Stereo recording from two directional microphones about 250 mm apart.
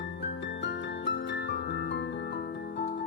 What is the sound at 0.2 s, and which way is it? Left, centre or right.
Music, left.